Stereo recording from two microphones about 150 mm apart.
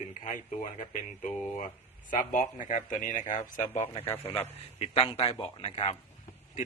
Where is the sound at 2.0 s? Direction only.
60° left (ahead or behind).